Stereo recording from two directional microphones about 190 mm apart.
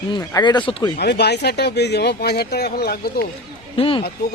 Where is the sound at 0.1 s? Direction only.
20° left (ahead or behind).